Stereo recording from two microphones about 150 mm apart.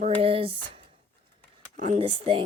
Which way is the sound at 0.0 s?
40° right (ahead or behind).